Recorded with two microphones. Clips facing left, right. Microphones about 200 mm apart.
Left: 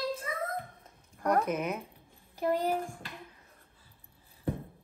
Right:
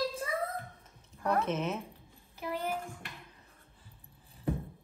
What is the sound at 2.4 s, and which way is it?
Speech, 45° left (ahead or behind).